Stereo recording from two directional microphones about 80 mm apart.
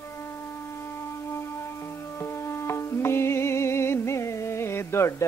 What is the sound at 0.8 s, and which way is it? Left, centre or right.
Music, left.